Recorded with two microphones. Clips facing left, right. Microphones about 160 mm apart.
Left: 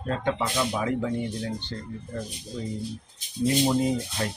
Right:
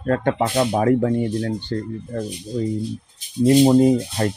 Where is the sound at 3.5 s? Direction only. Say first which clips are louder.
Right 10 dB; 45° right (ahead or behind).